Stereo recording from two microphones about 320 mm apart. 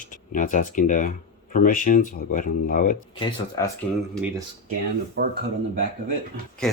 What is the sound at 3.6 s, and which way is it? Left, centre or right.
Speech, centre.